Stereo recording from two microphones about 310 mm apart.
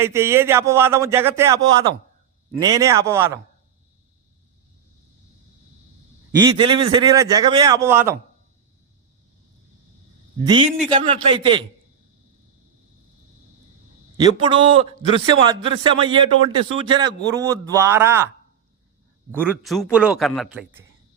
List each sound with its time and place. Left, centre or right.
0.0 s a man's voice: centre
6.4 s a man's voice: centre
10.4 s a man's voice: centre
10.7 s a man's voice: centre
10.9 s a man's voice: centre
14.2 s a man's voice: centre
19.3 s a man's voice: centre